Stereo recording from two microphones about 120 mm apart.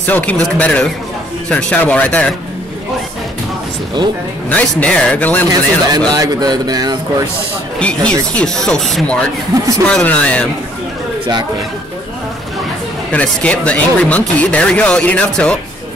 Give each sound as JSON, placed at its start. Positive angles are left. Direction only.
{"t": 0.0, "sound": "speech", "side_deg": 15}
{"t": 4.5, "sound": "speech", "side_deg": 10}
{"t": 5.9, "sound": "speech", "side_deg": -35}
{"t": 7.8, "sound": "speech", "side_deg": 10}
{"t": 9.5, "sound": "speech", "side_deg": -30}
{"t": 9.8, "sound": "speech", "side_deg": 10}
{"t": 13.1, "sound": "speech", "side_deg": 10}